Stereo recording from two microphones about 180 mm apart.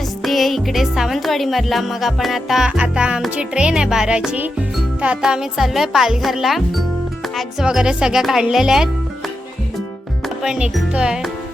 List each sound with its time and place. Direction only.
0.2 s speech: centre (ahead or behind)